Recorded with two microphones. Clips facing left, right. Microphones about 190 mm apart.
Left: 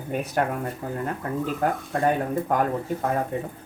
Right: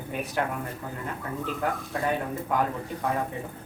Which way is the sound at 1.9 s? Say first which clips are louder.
Left 7 dB; 45° left (ahead or behind).